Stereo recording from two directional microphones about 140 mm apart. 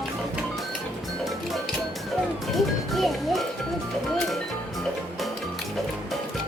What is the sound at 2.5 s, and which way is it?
Music, centre (ahead or behind).